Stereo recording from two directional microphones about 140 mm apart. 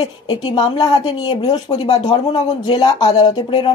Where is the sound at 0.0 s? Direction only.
30° left (ahead or behind).